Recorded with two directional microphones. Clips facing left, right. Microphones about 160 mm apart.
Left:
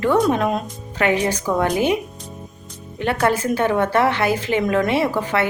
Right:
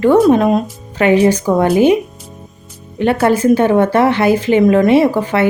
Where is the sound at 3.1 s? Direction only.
25° right (ahead or behind).